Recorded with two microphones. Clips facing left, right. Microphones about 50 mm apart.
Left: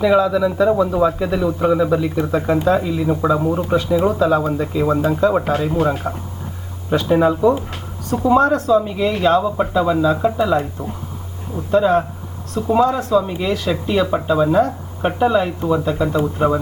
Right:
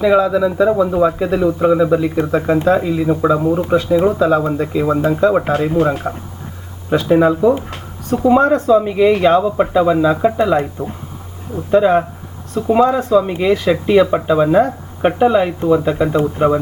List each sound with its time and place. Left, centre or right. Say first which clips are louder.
0.0 s speech: right 2 dB; centre
5.5 s speech: right 3 dB; right
6.0 s speech: right 1 dB; centre
8.1 s speech: right 2 dB; right
12.9 s speech: right 3 dB; right